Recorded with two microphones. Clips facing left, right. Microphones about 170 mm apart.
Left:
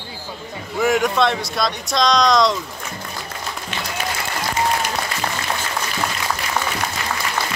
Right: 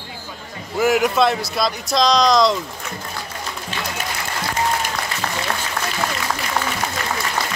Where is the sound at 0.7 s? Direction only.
5° right (ahead or behind).